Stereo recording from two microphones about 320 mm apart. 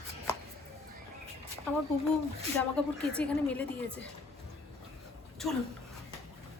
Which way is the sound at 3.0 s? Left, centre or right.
Centre.